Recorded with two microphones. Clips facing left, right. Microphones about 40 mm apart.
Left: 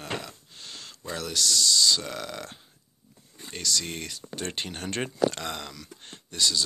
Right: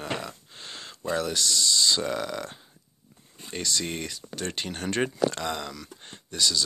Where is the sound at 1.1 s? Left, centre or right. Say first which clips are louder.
Right 1 dB; centre.